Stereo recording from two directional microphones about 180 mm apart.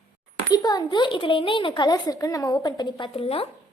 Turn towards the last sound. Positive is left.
turn(degrees=30)  # may be behind; listen again after turning